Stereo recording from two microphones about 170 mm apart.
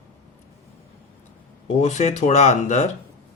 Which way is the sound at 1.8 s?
40° left (ahead or behind).